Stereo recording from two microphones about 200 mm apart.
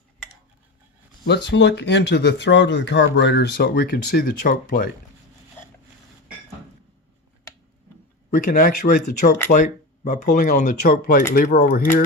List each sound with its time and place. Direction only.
1.3 s speech: 60° left (ahead or behind)
8.3 s speech: 45° left (ahead or behind)